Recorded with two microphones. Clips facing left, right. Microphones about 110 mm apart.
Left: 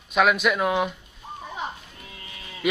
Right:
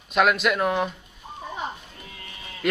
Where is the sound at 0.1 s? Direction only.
Centre (ahead or behind).